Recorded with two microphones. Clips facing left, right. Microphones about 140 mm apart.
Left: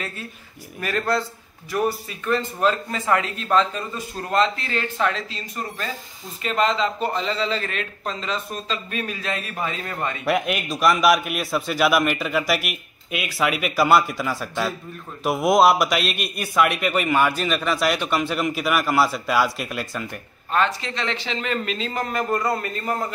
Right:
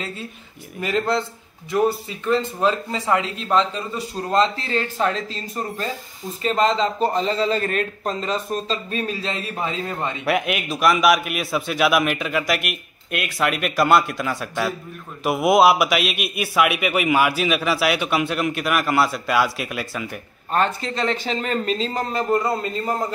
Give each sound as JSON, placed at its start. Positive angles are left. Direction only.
{"t": 0.7, "sound": "a man's voice", "side_deg": -20}
{"t": 4.3, "sound": "a man's voice", "side_deg": -30}
{"t": 6.4, "sound": "a man's voice", "side_deg": -35}
{"t": 10.2, "sound": "a man's voice", "side_deg": 0}
{"t": 20.5, "sound": "a man's voice", "side_deg": -40}